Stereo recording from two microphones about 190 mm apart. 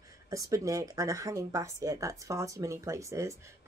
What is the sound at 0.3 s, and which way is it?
Speech, 15° right (ahead or behind).